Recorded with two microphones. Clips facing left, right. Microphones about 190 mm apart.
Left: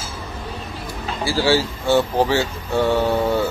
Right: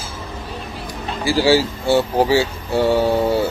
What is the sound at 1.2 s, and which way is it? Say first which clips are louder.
Speech: right 3 dB; 15° right (ahead or behind).